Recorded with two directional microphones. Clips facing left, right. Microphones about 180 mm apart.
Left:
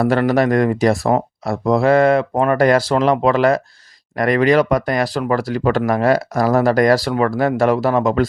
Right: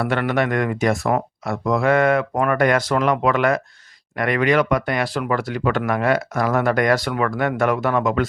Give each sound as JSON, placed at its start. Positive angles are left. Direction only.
{"t": 0.0, "sound": "speech", "side_deg": 35}